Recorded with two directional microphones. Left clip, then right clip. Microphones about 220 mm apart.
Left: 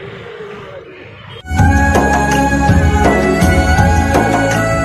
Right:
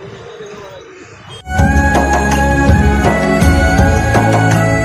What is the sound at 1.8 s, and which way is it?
Music, centre (ahead or behind).